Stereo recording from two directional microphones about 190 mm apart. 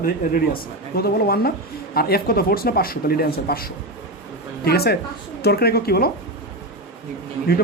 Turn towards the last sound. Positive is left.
turn(degrees=55)  # may be behind; listen again after turning